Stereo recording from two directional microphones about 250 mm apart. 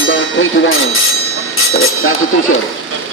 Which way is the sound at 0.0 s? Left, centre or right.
Left.